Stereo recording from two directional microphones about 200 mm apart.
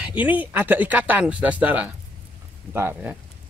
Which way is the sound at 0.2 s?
10° right (ahead or behind).